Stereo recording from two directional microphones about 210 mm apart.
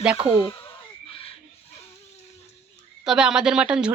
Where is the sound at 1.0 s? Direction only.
25° left (ahead or behind).